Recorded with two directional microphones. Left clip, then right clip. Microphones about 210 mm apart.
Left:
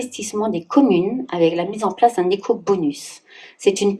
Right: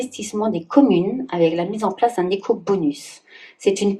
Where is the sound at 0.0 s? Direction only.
35° left (ahead or behind).